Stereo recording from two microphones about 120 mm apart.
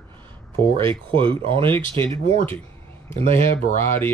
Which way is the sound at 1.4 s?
50° right (ahead or behind).